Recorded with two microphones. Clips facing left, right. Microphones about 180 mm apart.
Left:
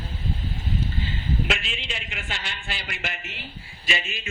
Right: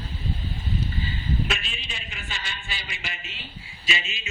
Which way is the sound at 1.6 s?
80° left.